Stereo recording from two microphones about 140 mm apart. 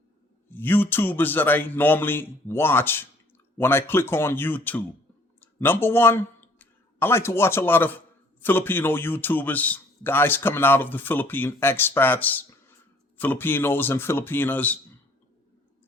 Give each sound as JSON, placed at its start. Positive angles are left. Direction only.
{"t": 0.5, "sound": "a man's voice", "side_deg": 15}